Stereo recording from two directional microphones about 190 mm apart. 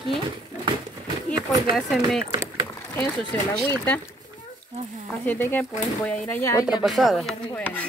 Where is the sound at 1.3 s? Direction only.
20° right (ahead or behind).